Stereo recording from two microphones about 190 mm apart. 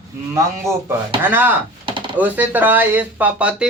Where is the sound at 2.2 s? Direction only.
10° right (ahead or behind).